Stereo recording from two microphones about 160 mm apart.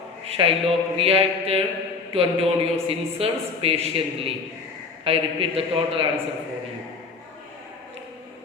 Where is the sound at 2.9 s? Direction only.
35° right (ahead or behind).